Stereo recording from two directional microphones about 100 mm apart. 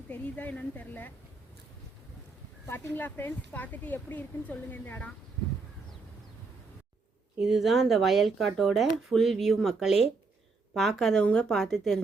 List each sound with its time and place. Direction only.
0.1 s speech: 15° left (ahead or behind)
2.6 s speech: 20° left (ahead or behind)
7.3 s speech: 5° right (ahead or behind)